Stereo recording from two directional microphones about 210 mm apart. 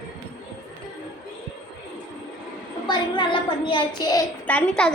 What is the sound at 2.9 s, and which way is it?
A child's voice, 25° left (ahead or behind).